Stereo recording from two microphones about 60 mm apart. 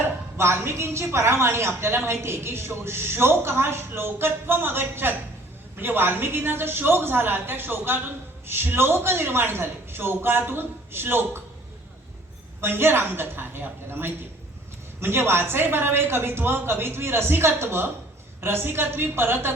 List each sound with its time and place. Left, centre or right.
0.0 s a woman's voice: right
12.6 s a man's voice: right